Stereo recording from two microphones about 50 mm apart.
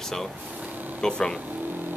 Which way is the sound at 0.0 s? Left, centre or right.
Centre.